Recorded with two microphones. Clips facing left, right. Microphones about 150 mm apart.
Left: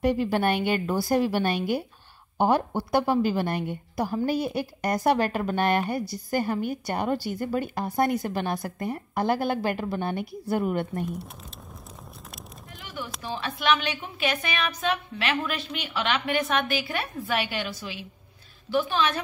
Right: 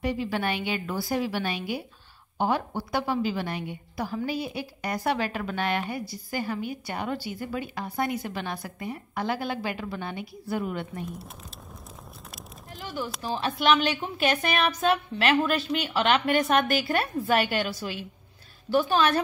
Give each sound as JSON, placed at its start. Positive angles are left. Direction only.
{"t": 0.0, "sound": "a woman's voice", "side_deg": 50}
{"t": 13.0, "sound": "speech", "side_deg": 0}
{"t": 13.3, "sound": "a woman's voice", "side_deg": -40}